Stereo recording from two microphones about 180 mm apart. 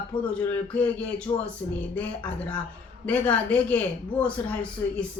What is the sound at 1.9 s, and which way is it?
A man's voice, 5° left (ahead or behind).